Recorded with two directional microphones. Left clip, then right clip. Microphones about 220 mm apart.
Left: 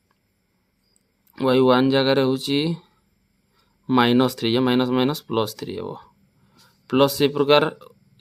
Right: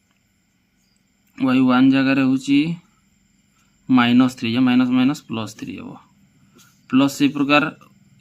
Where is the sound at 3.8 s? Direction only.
50° left (ahead or behind).